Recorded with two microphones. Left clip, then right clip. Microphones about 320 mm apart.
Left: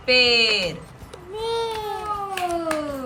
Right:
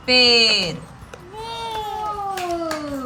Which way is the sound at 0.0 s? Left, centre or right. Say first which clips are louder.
Right 3 dB; centre.